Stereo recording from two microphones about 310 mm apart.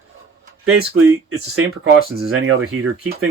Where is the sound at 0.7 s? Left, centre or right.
Right.